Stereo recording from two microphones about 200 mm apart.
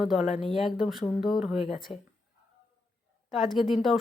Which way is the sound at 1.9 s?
30° left (ahead or behind).